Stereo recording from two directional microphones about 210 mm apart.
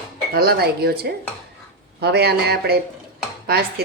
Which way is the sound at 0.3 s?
50° right (ahead or behind).